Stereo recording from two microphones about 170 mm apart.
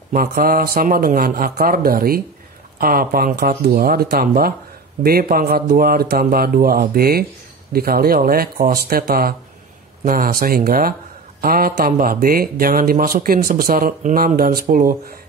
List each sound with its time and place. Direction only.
0.1 s speech: 60° right (ahead or behind)